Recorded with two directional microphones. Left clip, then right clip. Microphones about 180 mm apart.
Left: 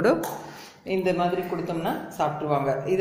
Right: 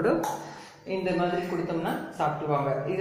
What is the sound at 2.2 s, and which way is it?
Speech, 55° left (ahead or behind).